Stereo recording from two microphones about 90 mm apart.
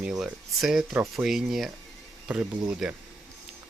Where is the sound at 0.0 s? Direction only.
5° right (ahead or behind).